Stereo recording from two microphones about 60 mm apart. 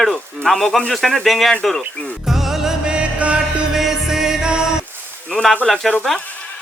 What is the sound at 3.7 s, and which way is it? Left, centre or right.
Music, centre.